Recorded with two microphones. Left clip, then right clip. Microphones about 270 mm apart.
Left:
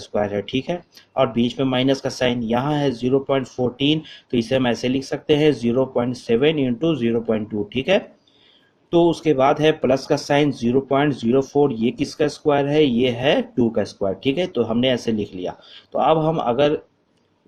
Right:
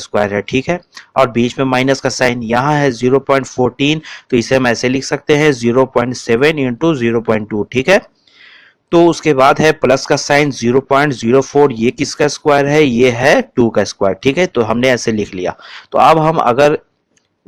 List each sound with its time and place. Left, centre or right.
0.0 s speech: right
9.0 s speech: right